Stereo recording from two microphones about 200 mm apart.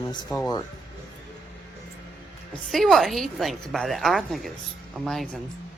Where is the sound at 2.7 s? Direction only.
Centre (ahead or behind).